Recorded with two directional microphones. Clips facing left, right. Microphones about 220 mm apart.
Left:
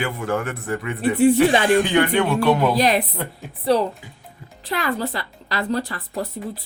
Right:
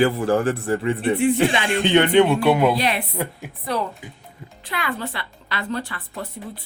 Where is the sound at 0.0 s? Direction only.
35° right (ahead or behind); by 2.7 s 10° right (ahead or behind).